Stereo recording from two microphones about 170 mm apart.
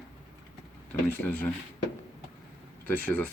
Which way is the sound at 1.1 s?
10° left (ahead or behind).